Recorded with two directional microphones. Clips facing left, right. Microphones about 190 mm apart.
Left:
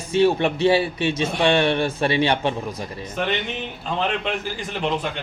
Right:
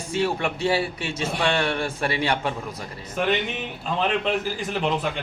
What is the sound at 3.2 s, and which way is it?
A man's voice, 5° right (ahead or behind).